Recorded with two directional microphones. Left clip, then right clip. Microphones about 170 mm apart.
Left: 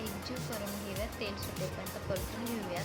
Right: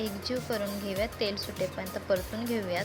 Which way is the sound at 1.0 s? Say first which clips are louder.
Right 9 dB; 45° right (ahead or behind).